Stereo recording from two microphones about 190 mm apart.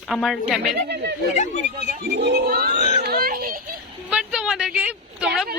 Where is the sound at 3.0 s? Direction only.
50° right (ahead or behind).